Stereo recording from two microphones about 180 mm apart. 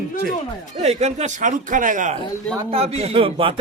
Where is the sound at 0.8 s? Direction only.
40° right (ahead or behind).